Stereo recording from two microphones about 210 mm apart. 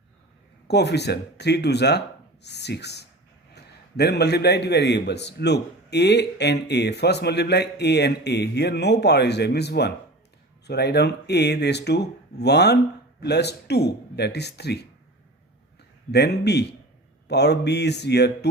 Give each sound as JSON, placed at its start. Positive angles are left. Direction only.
{"t": 0.7, "sound": "a man's voice", "side_deg": 55}
{"t": 16.1, "sound": "a man's voice", "side_deg": 50}